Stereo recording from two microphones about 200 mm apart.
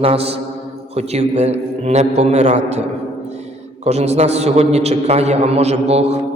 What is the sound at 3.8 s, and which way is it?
A man's voice, 35° right (ahead or behind).